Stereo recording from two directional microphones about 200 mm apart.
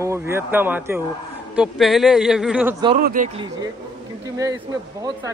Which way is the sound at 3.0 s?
45° right (ahead or behind).